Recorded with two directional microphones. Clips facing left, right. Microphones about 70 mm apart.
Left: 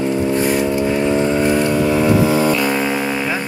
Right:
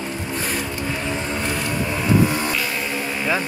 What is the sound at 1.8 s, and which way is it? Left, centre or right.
Vehicle, left.